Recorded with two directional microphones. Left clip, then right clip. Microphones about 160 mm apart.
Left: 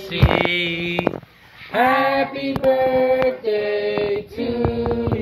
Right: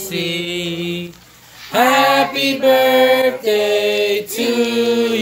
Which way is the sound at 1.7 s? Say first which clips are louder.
Right 4 dB; 15° right (ahead or behind).